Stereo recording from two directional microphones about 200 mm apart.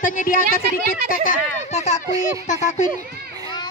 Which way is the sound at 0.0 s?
45° left (ahead or behind).